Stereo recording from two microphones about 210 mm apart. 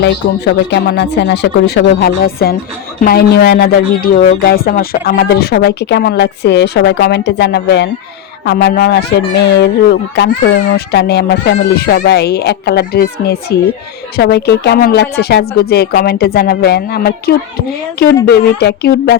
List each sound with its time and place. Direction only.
0.7 s speech: 55° left (ahead or behind)